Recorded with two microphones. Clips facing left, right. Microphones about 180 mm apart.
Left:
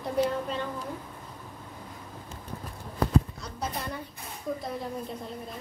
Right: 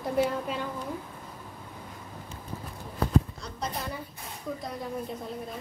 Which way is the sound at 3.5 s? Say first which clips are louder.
Even; 5° left (ahead or behind).